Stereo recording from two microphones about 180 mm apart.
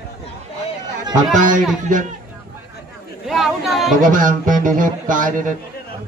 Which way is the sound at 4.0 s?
45° right (ahead or behind).